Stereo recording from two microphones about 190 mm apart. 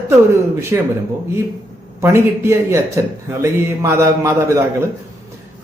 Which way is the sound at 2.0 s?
15° right (ahead or behind).